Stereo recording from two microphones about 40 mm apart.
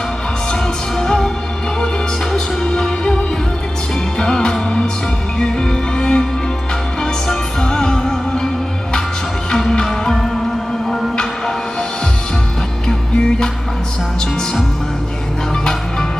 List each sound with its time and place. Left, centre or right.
0.5 s music: centre
2.3 s music: centre
4.2 s music: centre
9.7 s music: centre